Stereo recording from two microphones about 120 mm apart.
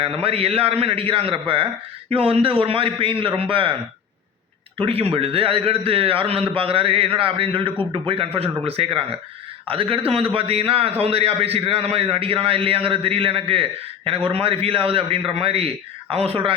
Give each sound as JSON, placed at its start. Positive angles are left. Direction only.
{"t": 0.0, "sound": "a man's voice", "side_deg": -55}
{"t": 4.8, "sound": "a man's voice", "side_deg": -50}